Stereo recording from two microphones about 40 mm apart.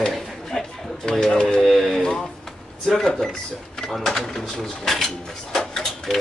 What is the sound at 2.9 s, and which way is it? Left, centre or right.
Speech, centre.